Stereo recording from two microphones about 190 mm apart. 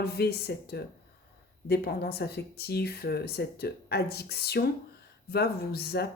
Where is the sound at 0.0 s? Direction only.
55° left (ahead or behind).